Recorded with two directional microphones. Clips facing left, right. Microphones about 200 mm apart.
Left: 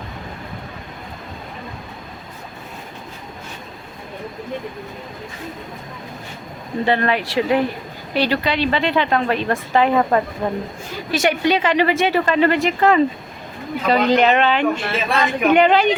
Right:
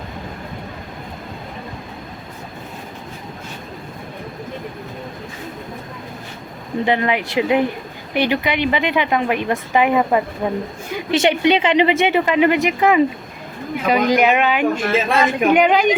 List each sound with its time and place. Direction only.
6.8 s a woman's voice: 15° right (ahead or behind)
11.1 s a woman's voice: 25° right (ahead or behind)